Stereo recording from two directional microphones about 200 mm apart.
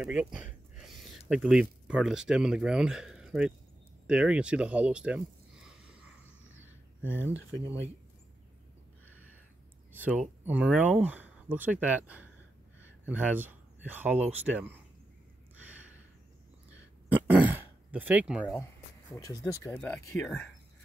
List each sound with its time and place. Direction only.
0.0 s speech: 5° right (ahead or behind)
9.9 s speech: 5° right (ahead or behind)
17.1 s throat clearing: 10° right (ahead or behind)
18.4 s speech: 5° left (ahead or behind)
19.1 s speech: 20° left (ahead or behind)